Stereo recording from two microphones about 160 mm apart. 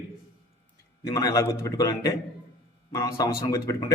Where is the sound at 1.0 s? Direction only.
20° left (ahead or behind).